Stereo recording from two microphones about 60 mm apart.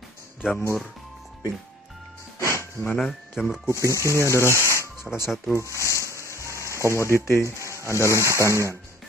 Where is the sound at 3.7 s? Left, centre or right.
Right.